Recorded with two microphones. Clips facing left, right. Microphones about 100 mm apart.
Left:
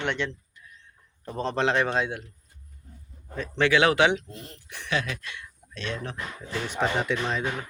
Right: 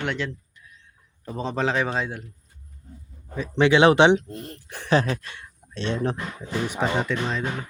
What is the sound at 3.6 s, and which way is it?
Speech, 25° right (ahead or behind).